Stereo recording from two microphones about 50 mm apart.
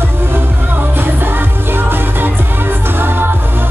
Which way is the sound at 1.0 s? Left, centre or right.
Right.